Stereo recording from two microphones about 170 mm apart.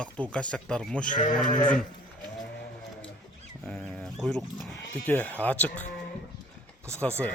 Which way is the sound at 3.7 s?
Centre (ahead or behind).